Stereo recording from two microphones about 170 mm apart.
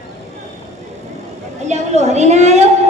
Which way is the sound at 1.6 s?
40° right (ahead or behind).